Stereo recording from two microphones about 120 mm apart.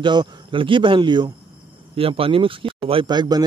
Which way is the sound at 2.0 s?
50° right (ahead or behind).